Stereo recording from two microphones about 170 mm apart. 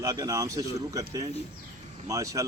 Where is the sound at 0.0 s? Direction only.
20° right (ahead or behind).